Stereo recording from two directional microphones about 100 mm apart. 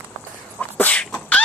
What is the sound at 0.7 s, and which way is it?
Beatboxing, 15° left (ahead or behind).